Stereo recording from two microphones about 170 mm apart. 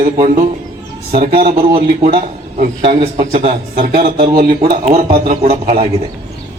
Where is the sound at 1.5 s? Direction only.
35° right (ahead or behind).